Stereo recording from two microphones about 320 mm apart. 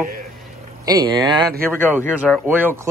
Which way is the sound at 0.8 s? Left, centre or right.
Centre.